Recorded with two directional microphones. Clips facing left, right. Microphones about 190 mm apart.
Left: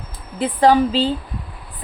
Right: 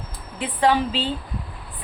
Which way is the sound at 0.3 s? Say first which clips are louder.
Left 6 dB; 40° left (ahead or behind).